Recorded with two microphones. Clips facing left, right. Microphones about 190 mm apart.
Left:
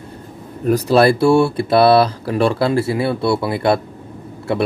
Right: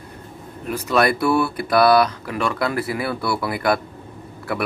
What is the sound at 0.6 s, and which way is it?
Speech, 35° left (ahead or behind).